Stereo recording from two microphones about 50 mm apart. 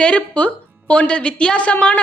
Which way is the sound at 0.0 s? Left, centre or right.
Left.